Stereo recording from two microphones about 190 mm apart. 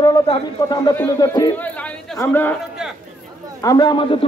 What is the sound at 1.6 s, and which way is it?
Chatter, 5° left (ahead or behind).